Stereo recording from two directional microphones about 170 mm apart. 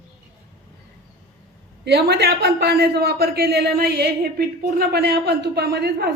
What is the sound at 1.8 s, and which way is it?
A woman's voice, 75° right (ahead or behind).